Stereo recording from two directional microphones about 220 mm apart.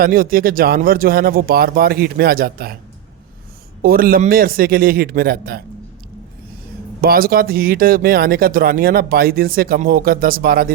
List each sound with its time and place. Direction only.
0.0 s speech: 40° right (ahead or behind)
3.8 s speech: 40° right (ahead or behind)
7.0 s speech: 40° right (ahead or behind)